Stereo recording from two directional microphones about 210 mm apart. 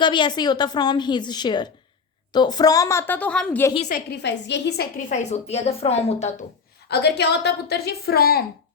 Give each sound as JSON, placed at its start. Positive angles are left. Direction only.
{"t": 0.0, "sound": "a woman's voice", "side_deg": 20}
{"t": 3.8, "sound": "a woman's voice", "side_deg": 40}
{"t": 4.2, "sound": "a woman's voice", "side_deg": 55}
{"t": 4.9, "sound": "a woman's voice", "side_deg": 35}
{"t": 6.8, "sound": "a woman's voice", "side_deg": 50}